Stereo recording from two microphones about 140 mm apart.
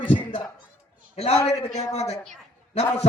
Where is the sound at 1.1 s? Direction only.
50° left (ahead or behind).